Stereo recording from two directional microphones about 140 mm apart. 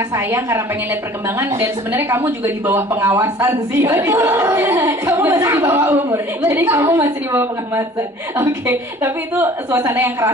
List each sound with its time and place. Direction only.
0.1 s a woman's voice: 20° right (ahead or behind)